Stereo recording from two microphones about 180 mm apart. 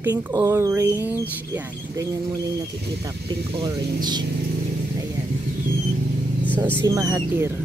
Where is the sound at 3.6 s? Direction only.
25° right (ahead or behind).